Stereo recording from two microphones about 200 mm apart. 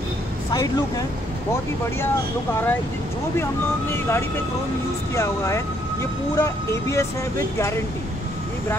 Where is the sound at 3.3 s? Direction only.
10° left (ahead or behind).